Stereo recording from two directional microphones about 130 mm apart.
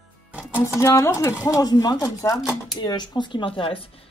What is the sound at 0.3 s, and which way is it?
Music, 10° right (ahead or behind).